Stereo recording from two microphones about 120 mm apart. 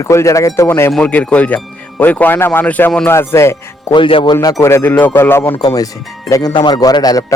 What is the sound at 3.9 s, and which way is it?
A man's voice, 45° left (ahead or behind).